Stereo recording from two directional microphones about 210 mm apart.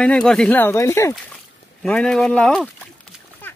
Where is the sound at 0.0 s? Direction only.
5° left (ahead or behind).